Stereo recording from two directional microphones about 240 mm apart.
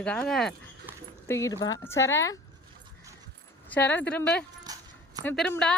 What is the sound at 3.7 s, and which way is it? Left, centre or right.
Speech, centre.